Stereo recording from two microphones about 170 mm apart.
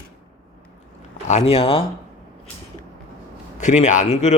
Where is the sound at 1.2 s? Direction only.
40° left (ahead or behind).